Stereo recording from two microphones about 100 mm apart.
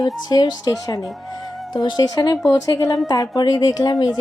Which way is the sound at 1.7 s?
45° left (ahead or behind).